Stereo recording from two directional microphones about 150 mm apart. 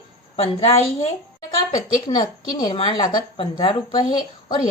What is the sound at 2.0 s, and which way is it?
A woman's voice, 30° left (ahead or behind).